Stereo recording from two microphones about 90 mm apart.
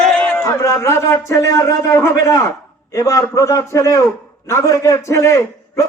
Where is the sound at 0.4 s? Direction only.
40° left (ahead or behind).